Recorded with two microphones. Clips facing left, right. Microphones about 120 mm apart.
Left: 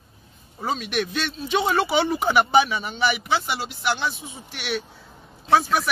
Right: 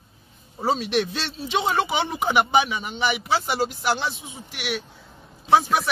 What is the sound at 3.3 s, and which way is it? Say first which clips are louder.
Speech: right 2 dB; 40° right (ahead or behind).